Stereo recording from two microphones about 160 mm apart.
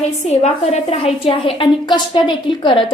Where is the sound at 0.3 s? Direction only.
45° left (ahead or behind).